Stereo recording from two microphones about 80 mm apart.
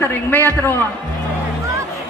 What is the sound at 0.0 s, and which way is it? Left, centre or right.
Speech, left.